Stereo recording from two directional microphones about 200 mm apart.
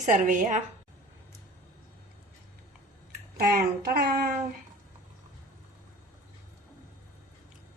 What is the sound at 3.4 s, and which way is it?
Speech, 50° right (ahead or behind).